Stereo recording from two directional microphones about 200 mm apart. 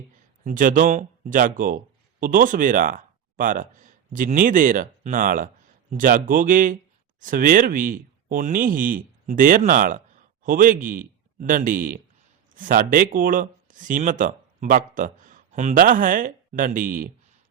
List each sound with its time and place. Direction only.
0.4 s speech: 40° right (ahead or behind)